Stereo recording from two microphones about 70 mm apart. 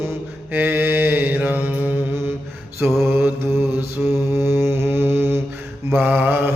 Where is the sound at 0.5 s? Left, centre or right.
Right.